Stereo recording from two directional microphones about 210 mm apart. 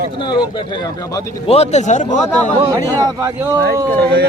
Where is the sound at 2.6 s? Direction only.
15° right (ahead or behind).